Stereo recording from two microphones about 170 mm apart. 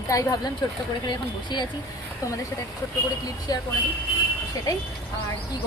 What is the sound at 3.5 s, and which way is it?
Speech, 20° left (ahead or behind).